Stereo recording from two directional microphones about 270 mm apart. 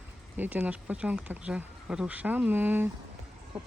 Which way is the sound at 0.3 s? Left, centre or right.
Centre.